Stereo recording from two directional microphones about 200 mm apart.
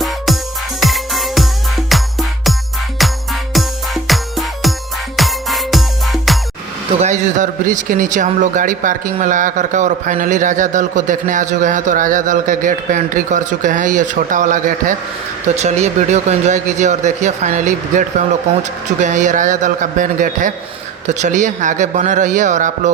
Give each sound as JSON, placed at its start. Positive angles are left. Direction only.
{"t": 0.8, "sound": "music", "side_deg": 0}
{"t": 7.0, "sound": "a man's voice", "side_deg": -35}